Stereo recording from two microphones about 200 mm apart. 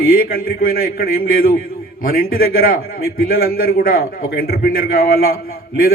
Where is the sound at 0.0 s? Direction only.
45° left (ahead or behind).